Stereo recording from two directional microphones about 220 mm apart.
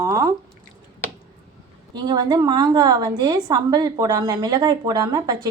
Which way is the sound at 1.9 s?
20° right (ahead or behind).